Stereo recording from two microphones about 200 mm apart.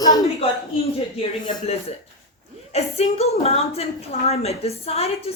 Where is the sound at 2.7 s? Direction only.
30° left (ahead or behind).